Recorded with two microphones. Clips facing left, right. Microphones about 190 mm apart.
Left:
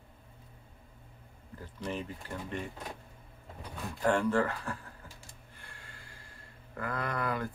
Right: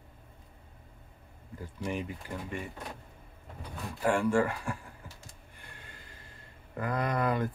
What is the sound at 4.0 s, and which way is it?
Speech, 10° right (ahead or behind).